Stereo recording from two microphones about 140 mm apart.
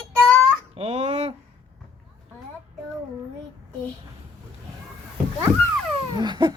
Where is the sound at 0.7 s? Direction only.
50° right (ahead or behind).